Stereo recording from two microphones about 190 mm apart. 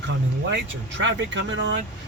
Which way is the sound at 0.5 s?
70° right (ahead or behind).